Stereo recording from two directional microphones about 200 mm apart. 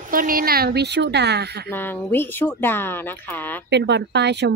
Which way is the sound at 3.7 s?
60° right (ahead or behind).